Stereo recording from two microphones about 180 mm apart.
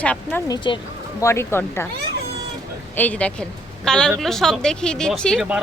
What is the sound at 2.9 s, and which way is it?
A woman's voice, 10° left (ahead or behind).